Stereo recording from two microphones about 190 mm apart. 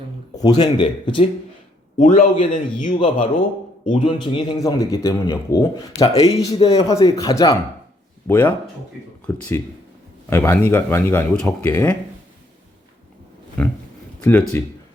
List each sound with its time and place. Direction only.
0.6 s a man's voice: 25° left (ahead or behind)
2.0 s a man's voice: 40° left (ahead or behind)
3.0 s a man's voice: 30° left (ahead or behind); by 11.9 s 10° left (ahead or behind)